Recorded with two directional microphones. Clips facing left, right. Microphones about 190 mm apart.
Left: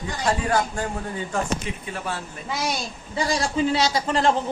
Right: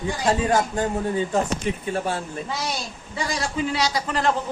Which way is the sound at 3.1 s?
30° left (ahead or behind).